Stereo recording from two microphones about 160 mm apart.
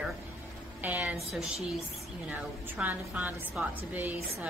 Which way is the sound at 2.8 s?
10° right (ahead or behind).